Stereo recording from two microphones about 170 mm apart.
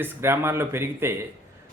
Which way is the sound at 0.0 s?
15° right (ahead or behind).